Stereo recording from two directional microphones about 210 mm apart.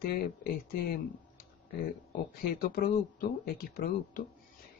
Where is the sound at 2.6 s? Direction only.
40° left (ahead or behind).